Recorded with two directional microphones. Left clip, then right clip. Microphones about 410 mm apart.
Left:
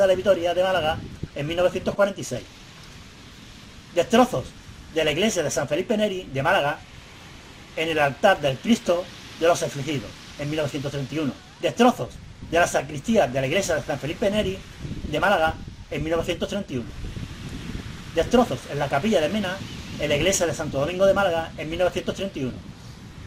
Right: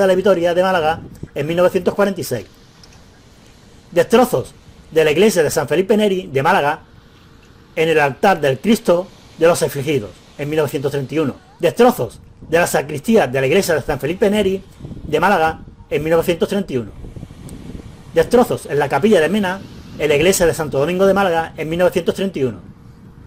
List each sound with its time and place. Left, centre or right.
0.0 s speech: right
4.3 s speech: right
7.8 s speech: right
18.1 s speech: right